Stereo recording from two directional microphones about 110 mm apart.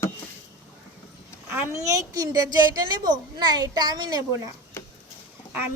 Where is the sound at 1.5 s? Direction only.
20° right (ahead or behind); by 4.2 s 40° right (ahead or behind).